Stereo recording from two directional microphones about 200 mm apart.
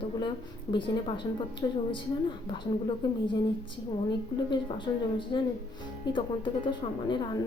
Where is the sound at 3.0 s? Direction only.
20° left (ahead or behind).